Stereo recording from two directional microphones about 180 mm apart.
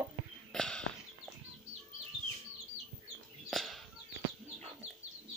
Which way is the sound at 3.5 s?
Centre (ahead or behind).